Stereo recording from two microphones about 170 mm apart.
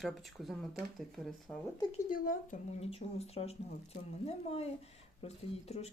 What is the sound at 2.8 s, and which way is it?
Speech, 35° left (ahead or behind).